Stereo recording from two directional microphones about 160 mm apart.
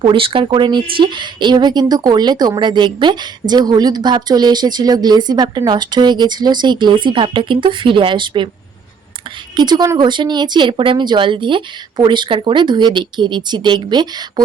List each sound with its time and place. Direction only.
0.0 s speech: 35° right (ahead or behind)
9.6 s speech: 25° right (ahead or behind)